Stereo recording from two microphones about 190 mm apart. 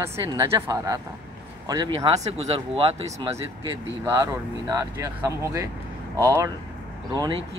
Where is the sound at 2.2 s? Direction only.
30° right (ahead or behind).